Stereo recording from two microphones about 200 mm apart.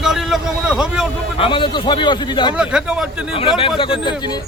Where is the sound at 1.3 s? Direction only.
25° left (ahead or behind).